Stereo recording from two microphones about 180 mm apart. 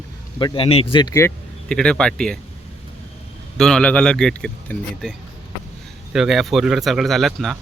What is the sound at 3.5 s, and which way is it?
Speech, 5° left (ahead or behind).